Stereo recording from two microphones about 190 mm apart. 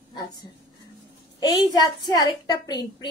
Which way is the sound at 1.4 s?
20° left (ahead or behind).